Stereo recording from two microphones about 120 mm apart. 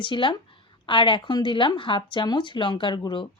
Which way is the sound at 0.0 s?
40° left (ahead or behind).